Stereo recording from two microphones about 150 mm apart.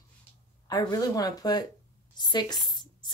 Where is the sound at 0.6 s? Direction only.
25° left (ahead or behind).